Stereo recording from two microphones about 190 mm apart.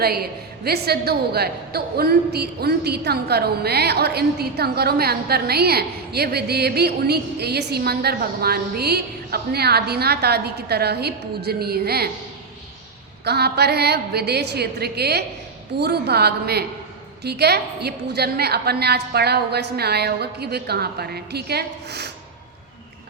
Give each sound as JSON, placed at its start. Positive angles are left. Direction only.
{"t": 0.0, "sound": "a woman's voice", "side_deg": -55}
{"t": 13.2, "sound": "a woman's voice", "side_deg": -60}